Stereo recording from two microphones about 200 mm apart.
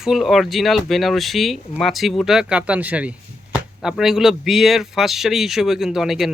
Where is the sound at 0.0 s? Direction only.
Centre (ahead or behind).